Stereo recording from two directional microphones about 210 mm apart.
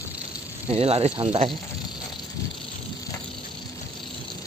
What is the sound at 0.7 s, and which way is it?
Speech, 30° right (ahead or behind).